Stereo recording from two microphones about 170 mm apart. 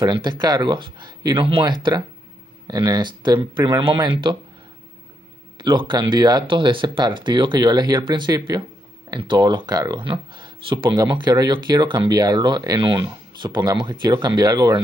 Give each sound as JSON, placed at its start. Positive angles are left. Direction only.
{"t": 0.0, "sound": "speech", "side_deg": -25}
{"t": 5.6, "sound": "speech", "side_deg": -25}